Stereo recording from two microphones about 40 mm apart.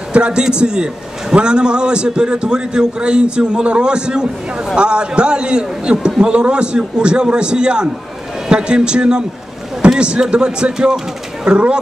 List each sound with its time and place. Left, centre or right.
0.1 s a man's voice: right